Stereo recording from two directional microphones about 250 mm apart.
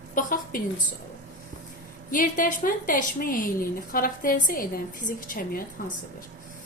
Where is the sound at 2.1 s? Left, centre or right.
Left.